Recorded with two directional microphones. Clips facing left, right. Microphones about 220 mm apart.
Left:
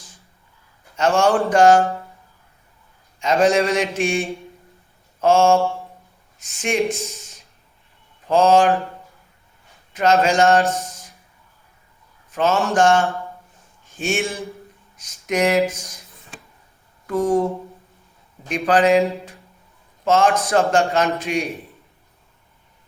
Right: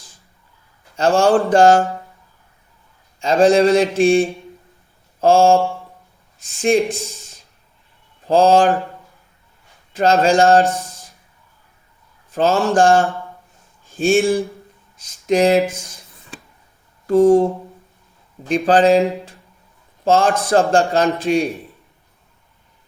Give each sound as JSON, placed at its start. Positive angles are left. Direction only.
{"t": 0.9, "sound": "speech", "side_deg": -30}
{"t": 3.2, "sound": "speech", "side_deg": -30}
{"t": 8.3, "sound": "speech", "side_deg": -30}
{"t": 9.9, "sound": "speech", "side_deg": -30}
{"t": 12.3, "sound": "speech", "side_deg": -30}
{"t": 14.9, "sound": "a sound", "side_deg": -30}
{"t": 17.1, "sound": "a sound", "side_deg": -30}
{"t": 18.4, "sound": "speech", "side_deg": -30}